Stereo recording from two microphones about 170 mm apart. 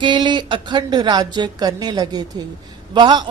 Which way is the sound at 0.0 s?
25° right (ahead or behind).